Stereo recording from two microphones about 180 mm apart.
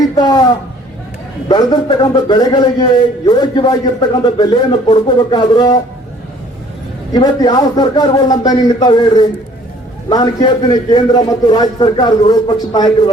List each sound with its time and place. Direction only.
0.0 s a sound: 25° left (ahead or behind)
1.5 s a man's voice: 25° left (ahead or behind)
7.1 s a man's voice: 25° left (ahead or behind)